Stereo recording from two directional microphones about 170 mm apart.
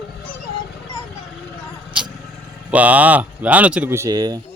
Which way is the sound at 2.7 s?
10° right (ahead or behind).